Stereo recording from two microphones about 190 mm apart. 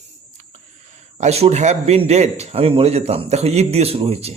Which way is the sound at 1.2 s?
35° right (ahead or behind).